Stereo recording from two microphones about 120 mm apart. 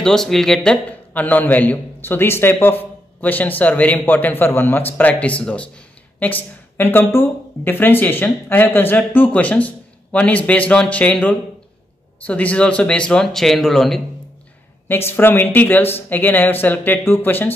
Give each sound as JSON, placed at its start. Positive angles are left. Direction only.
{"t": 0.0, "sound": "a man's voice", "side_deg": 5}
{"t": 14.9, "sound": "a man's voice", "side_deg": 20}